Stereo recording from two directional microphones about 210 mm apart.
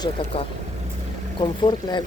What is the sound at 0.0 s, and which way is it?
Speech, 25° left (ahead or behind).